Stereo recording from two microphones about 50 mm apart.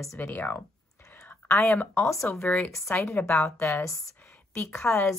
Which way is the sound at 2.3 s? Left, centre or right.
Left.